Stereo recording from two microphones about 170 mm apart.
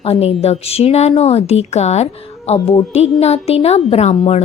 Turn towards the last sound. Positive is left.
turn(degrees=40)  # may be behind; listen again after turning